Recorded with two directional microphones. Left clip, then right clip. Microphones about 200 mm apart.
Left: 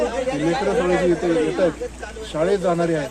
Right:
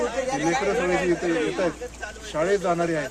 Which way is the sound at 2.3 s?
5° right (ahead or behind).